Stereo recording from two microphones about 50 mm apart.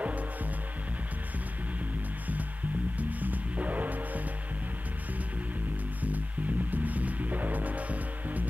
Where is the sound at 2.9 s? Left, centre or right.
Right.